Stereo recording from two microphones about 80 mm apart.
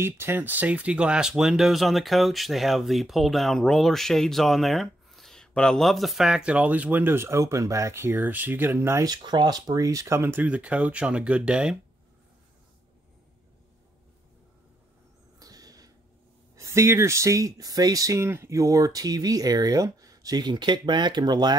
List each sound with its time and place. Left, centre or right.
0.0 s speech: right
9.0 s speech: right; by 11.8 s centre
15.3 s a sound: right
16.5 s speech: right